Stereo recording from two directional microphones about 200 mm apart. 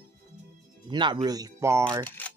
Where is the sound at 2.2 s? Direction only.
10° left (ahead or behind).